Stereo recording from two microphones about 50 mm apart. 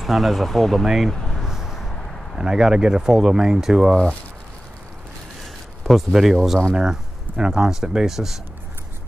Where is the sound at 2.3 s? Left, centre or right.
Centre.